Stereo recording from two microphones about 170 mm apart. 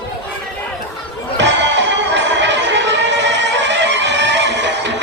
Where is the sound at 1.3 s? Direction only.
90° right.